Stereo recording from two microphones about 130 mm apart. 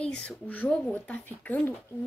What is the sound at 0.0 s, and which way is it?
A woman's voice, 5° left (ahead or behind).